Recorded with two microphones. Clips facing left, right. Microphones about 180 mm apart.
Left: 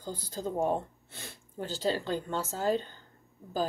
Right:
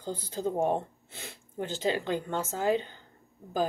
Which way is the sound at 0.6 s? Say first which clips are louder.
Even; 20° right (ahead or behind).